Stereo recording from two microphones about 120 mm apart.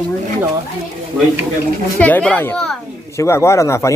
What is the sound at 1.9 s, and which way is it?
Speech, 10° left (ahead or behind).